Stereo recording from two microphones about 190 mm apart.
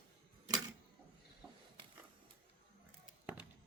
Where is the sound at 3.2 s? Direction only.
5° right (ahead or behind).